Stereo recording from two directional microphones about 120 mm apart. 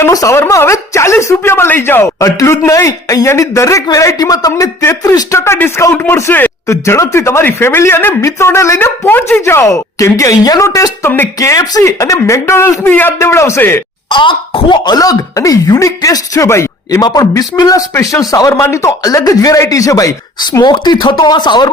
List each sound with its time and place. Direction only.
0.0 s speech: 30° left (ahead or behind)
14.1 s speech: 40° left (ahead or behind)